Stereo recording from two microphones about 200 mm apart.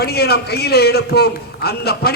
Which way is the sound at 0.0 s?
50° left (ahead or behind).